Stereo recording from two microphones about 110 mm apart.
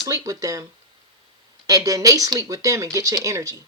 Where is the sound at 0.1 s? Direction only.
30° right (ahead or behind).